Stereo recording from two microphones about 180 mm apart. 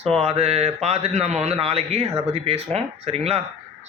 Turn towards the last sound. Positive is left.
turn(degrees=-35)  # may be behind; listen again after turning